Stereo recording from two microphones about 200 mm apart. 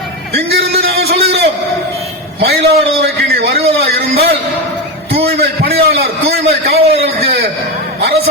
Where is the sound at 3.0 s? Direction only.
55° right (ahead or behind).